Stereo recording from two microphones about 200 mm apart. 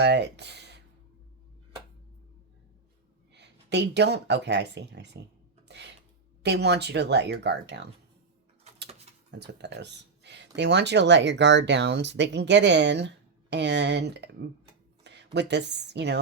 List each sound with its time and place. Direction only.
0.0 s speech: 60° right (ahead or behind)
3.3 s speech: 60° right (ahead or behind)
5.6 s a sound: 60° right (ahead or behind)
6.4 s speech: 55° right (ahead or behind)
9.3 s a woman's voice: 60° right (ahead or behind)